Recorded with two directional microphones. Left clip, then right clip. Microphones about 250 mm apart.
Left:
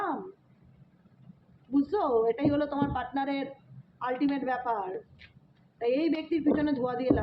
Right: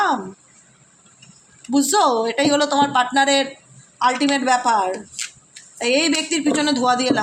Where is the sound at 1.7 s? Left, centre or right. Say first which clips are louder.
Right 10 dB; right.